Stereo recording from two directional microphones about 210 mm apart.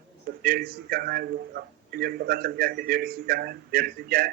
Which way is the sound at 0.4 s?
45° right (ahead or behind).